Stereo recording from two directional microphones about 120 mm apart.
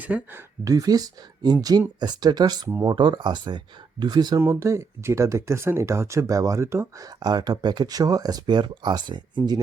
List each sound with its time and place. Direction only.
0.0 s speech: 10° right (ahead or behind)
0.6 s speech: 30° right (ahead or behind)
4.4 s speech: 25° right (ahead or behind)
7.2 s speech: 35° right (ahead or behind)